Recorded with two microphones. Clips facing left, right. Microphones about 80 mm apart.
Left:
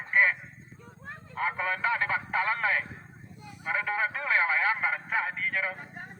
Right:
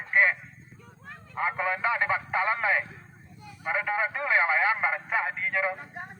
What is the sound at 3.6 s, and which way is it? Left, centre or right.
A man's voice, centre.